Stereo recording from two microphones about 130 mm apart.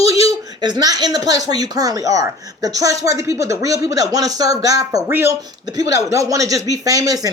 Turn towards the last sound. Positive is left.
turn(degrees=-25)  # may be behind; listen again after turning